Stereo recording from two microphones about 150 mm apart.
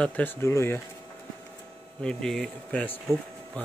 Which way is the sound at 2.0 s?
5° left (ahead or behind).